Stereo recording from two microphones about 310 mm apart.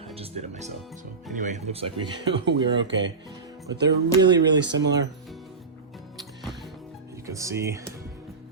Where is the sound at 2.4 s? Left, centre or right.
Right.